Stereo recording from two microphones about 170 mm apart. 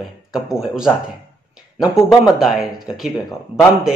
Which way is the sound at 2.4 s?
Centre (ahead or behind).